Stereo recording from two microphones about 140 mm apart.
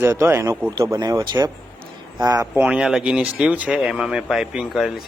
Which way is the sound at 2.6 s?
10° right (ahead or behind).